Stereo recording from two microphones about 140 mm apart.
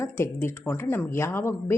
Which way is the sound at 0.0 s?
20° left (ahead or behind).